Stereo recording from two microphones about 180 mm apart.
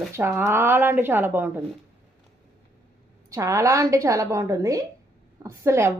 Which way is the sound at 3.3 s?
20° right (ahead or behind).